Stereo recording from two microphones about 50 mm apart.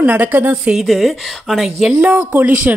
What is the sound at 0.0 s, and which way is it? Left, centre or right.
Speech, right.